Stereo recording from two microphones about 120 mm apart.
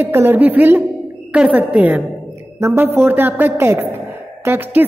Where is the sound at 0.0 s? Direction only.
20° right (ahead or behind).